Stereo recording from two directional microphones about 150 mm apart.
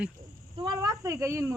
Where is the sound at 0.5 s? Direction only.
30° right (ahead or behind).